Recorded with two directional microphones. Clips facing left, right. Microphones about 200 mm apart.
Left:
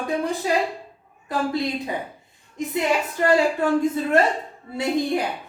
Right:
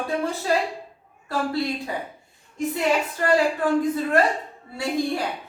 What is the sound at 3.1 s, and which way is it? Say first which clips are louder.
Speech: left 2 dB; 25° left (ahead or behind).